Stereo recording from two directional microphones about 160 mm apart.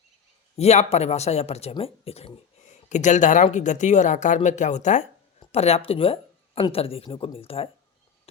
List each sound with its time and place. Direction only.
0.5 s speech: 40° left (ahead or behind)
2.9 s speech: 50° left (ahead or behind)